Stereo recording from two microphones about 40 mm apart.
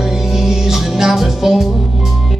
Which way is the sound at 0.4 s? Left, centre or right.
Centre.